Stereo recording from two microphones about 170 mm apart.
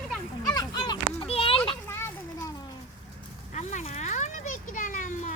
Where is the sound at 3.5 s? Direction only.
40° left (ahead or behind).